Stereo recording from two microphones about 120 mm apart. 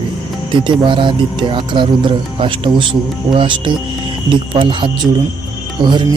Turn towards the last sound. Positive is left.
turn(degrees=-40)  # may be behind; listen again after turning